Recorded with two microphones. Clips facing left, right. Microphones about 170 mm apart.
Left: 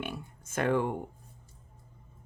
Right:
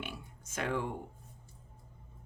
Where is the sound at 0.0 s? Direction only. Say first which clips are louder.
Left 6 dB; 55° left (ahead or behind).